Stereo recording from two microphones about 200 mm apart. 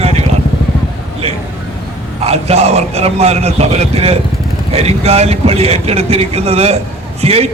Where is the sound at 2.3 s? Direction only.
30° right (ahead or behind).